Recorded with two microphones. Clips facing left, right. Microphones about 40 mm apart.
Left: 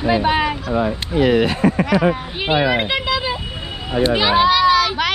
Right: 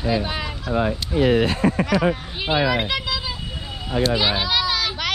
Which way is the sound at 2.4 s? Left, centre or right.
Left.